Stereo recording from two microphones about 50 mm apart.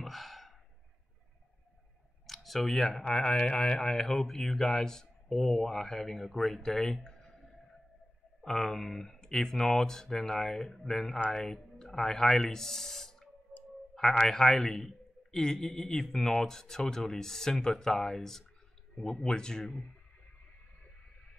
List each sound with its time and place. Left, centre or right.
0.0 s sigh: centre
2.2 s speech: centre
8.4 s speech: centre
13.5 s a sound: left
13.9 s speech: centre